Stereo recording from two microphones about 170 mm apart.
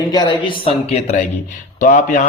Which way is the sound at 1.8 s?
50° left (ahead or behind).